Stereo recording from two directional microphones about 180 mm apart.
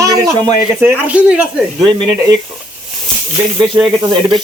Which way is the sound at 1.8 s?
25° right (ahead or behind).